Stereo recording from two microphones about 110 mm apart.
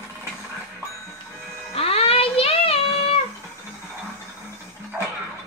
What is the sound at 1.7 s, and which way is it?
Music, 65° left (ahead or behind).